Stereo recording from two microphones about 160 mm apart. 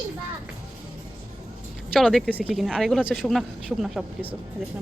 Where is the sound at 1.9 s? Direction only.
Centre (ahead or behind).